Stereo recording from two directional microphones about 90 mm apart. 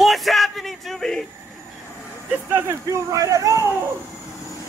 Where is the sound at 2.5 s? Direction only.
30° right (ahead or behind).